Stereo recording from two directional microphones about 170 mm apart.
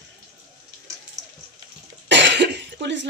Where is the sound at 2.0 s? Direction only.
90° right.